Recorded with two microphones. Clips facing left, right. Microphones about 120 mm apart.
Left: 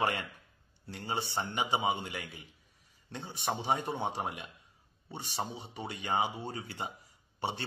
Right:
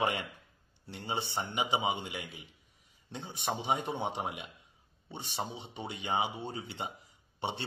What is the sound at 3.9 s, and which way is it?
A man's voice, 20° right (ahead or behind).